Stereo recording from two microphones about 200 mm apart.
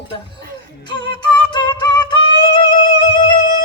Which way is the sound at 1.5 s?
20° left (ahead or behind).